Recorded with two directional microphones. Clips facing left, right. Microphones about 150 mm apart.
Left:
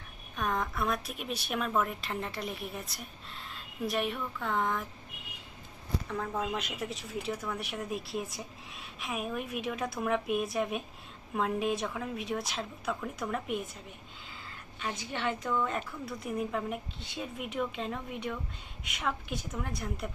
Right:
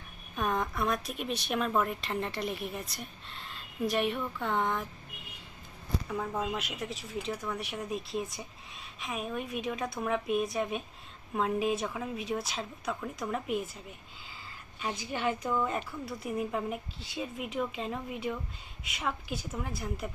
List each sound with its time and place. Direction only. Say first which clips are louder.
0.3 s speech: right 1 dB; centre (ahead or behind)
6.1 s speech: even; 10° right (ahead or behind)
14.8 s speech: right 2 dB; 5° right (ahead or behind)